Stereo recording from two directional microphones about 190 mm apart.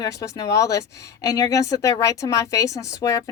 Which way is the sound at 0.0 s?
15° left (ahead or behind).